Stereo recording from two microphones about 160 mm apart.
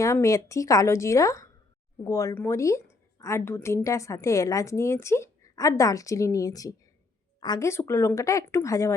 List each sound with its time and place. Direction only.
0.0 s a woman's voice: 20° left (ahead or behind)